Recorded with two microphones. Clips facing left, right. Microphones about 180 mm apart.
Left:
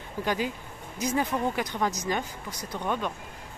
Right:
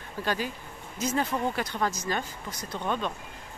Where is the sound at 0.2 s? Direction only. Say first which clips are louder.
Left 2 dB; 15° left (ahead or behind).